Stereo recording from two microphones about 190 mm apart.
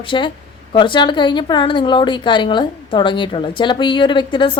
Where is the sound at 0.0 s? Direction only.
25° left (ahead or behind).